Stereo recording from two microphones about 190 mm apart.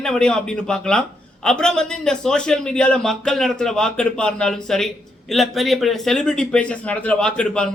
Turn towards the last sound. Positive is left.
turn(degrees=5)  # may be behind; listen again after turning